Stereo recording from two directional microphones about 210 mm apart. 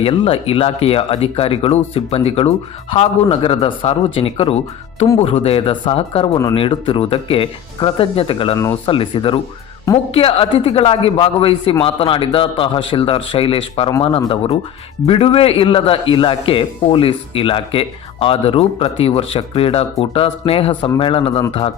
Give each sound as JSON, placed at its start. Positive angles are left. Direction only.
{"t": 0.0, "sound": "a man's voice", "side_deg": 25}